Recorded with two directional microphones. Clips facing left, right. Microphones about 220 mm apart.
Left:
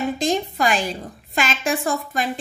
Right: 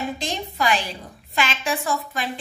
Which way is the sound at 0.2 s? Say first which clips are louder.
Left 5 dB; 50° left (ahead or behind).